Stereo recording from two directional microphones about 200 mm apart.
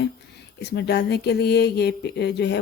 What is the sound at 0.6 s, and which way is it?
Speech, 55° left (ahead or behind).